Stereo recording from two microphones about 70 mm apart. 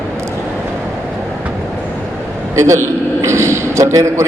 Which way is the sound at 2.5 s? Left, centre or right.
Right.